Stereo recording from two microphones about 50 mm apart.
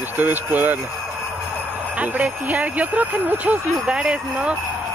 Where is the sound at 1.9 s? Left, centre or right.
Right.